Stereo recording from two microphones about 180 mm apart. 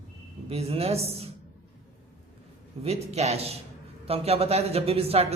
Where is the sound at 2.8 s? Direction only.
35° right (ahead or behind).